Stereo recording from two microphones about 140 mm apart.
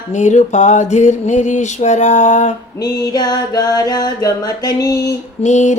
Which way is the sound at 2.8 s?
25° left (ahead or behind).